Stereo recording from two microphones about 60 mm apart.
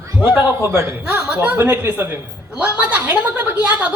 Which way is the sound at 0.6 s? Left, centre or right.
Right.